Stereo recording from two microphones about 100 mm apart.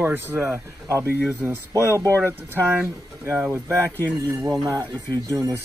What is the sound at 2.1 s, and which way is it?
Speech, 25° right (ahead or behind).